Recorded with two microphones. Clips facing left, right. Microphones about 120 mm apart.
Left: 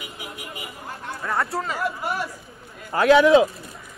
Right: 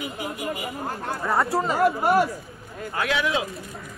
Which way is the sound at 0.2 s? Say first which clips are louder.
Right 7 dB; 50° right (ahead or behind).